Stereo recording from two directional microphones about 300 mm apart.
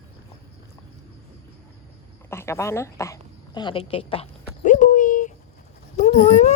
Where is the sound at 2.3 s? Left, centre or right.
Centre.